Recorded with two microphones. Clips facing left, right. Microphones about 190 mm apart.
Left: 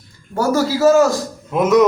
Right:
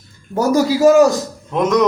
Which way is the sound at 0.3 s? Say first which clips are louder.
Right 2 dB; 15° right (ahead or behind).